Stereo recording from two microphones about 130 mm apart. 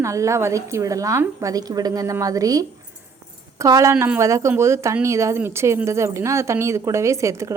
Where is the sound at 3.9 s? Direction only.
10° right (ahead or behind).